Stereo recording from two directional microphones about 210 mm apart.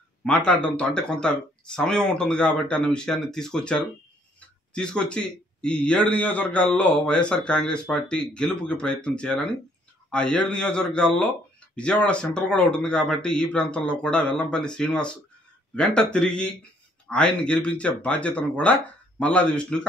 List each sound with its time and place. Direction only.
0.2 s a man's voice: 5° left (ahead or behind)